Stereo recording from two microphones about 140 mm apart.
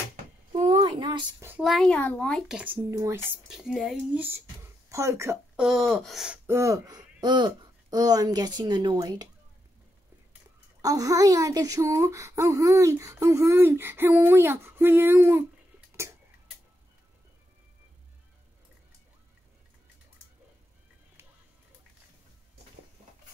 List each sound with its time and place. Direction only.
0.6 s a sound: 40° right (ahead or behind)
1.6 s speech: centre (ahead or behind)
2.5 s speech: 10° right (ahead or behind)
3.4 s speech: 5° right (ahead or behind); by 5.4 s 20° right (ahead or behind)
5.6 s speech: centre (ahead or behind)
6.4 s speech: 20° right (ahead or behind)
10.8 s speech: 25° right (ahead or behind)